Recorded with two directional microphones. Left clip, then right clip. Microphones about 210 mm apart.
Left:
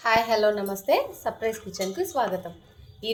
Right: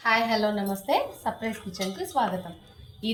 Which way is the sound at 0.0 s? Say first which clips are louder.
Left 2 dB; 50° left (ahead or behind).